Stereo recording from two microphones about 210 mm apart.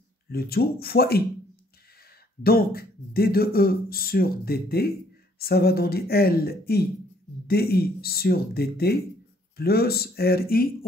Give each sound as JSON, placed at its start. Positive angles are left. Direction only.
{"t": 0.3, "sound": "speech", "side_deg": 45}
{"t": 2.4, "sound": "speech", "side_deg": 45}